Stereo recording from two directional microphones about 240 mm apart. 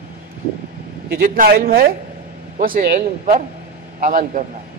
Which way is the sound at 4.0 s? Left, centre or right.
Right.